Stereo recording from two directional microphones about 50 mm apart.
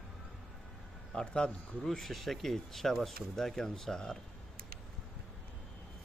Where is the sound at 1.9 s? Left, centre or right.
Centre.